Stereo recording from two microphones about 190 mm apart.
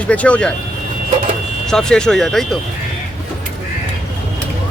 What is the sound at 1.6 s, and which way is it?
Speech, 5° left (ahead or behind).